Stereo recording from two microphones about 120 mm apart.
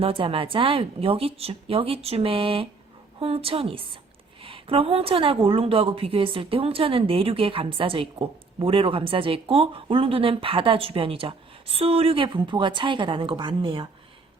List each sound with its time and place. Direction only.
0.0 s a woman's voice: 50° right (ahead or behind)